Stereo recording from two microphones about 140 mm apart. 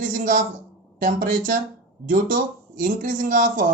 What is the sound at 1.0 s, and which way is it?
Speech, 80° right.